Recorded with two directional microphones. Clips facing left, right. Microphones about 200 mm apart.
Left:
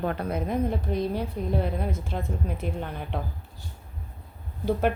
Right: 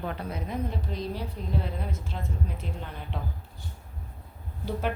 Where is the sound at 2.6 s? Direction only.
55° left (ahead or behind).